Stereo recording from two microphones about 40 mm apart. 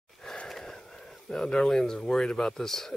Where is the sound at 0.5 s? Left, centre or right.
Centre.